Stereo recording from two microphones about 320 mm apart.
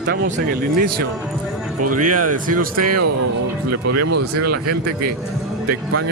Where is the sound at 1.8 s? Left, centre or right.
Right.